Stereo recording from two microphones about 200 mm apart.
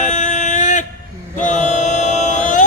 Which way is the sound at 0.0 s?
40° left (ahead or behind).